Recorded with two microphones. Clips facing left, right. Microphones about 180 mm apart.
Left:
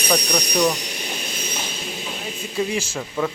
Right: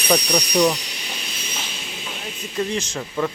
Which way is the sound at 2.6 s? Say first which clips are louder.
Even; 10° left (ahead or behind).